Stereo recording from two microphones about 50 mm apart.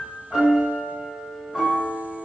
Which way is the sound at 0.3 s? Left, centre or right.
Centre.